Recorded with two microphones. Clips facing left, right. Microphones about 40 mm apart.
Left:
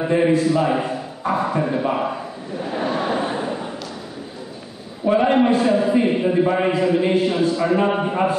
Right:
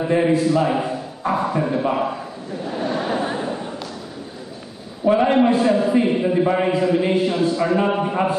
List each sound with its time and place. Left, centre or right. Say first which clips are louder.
0.1 s a man's voice: even; centre
2.6 s a sound: left 1 dB; centre
5.0 s a man's voice: right 1 dB; centre